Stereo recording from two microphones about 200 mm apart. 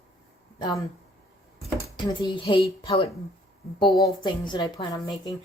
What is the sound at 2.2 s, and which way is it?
A woman's voice, 25° left (ahead or behind).